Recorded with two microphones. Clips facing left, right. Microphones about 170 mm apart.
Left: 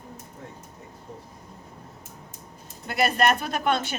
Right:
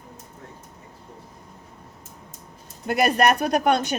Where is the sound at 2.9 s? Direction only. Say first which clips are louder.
Right 3 dB; 45° right (ahead or behind).